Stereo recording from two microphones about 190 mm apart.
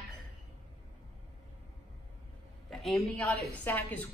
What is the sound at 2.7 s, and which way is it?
A woman's voice, 5° left (ahead or behind).